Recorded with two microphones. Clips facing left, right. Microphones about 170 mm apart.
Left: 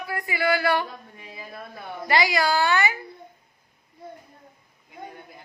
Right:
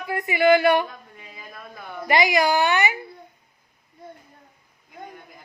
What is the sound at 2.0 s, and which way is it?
Speech, 20° right (ahead or behind).